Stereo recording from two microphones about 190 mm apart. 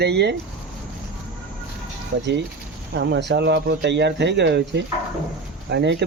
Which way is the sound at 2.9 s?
70° right (ahead or behind).